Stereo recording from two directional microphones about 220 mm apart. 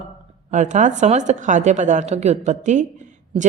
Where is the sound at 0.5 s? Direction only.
35° right (ahead or behind).